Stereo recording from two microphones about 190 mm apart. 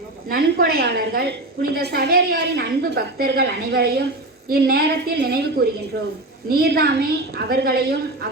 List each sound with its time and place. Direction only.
0.3 s a woman's voice: 55° right (ahead or behind)